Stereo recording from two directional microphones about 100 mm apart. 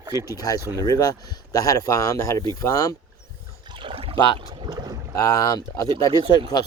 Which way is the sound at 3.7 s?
65° right (ahead or behind).